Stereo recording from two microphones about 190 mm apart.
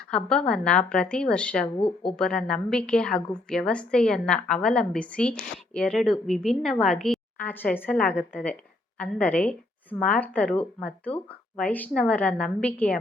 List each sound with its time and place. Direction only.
0.1 s a woman's voice: 5° left (ahead or behind)
1.8 s speech: 25° left (ahead or behind)
2.1 s a woman's voice: 5° left (ahead or behind)